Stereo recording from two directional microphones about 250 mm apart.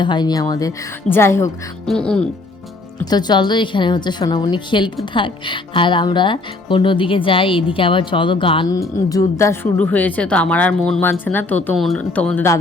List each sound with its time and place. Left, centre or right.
0.0 s speech: centre
3.1 s speech: centre